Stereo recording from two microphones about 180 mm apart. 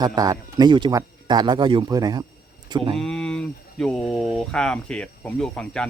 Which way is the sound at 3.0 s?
5° left (ahead or behind).